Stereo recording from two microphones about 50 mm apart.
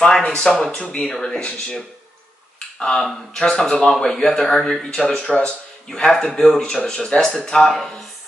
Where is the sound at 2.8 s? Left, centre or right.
Centre.